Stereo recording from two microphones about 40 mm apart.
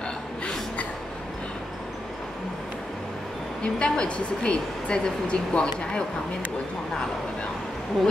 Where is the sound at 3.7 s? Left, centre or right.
Left.